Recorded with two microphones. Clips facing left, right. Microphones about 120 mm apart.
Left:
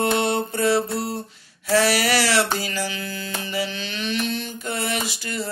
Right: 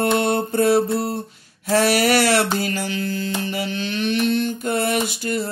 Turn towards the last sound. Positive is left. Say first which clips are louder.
# right 6 dB
turn(degrees=-50)  # may be behind; listen again after turning